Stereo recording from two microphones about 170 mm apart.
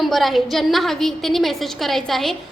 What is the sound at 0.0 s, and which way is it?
A woman's voice, centre (ahead or behind).